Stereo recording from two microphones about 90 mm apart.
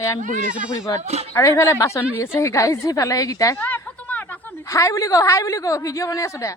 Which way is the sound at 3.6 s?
20° left (ahead or behind).